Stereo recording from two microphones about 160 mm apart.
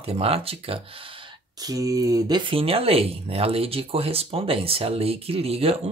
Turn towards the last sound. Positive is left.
turn(degrees=-40)  # may be behind; listen again after turning